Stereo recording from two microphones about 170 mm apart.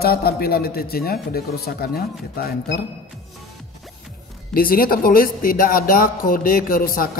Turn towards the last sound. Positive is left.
turn(degrees=55)  # may be behind; listen again after turning